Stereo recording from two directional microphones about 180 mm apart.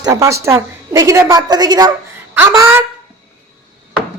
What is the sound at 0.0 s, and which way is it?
A woman's voice, 20° right (ahead or behind).